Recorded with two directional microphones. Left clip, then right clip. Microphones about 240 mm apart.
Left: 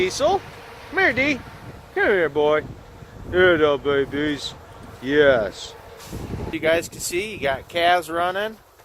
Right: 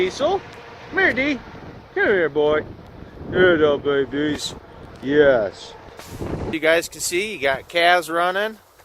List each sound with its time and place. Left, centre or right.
0.2 s speech: right
6.5 s speech: right